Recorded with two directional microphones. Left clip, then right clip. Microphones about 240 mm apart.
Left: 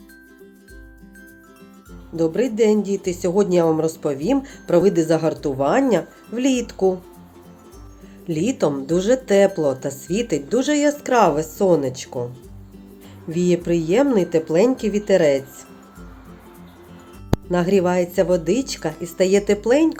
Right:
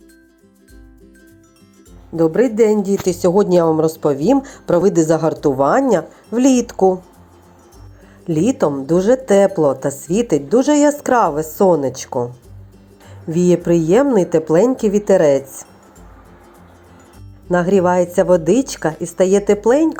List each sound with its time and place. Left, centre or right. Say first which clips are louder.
2.1 s speech: right 6 dB; centre
8.3 s speech: right 4 dB; centre
13.3 s speech: right 5 dB; centre
17.5 s speech: right 5 dB; centre